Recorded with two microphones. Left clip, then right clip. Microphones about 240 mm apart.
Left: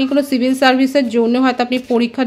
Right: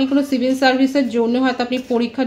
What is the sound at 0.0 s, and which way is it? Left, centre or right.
Speech, left.